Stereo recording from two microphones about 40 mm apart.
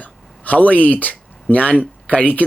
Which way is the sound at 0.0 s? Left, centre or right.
Left.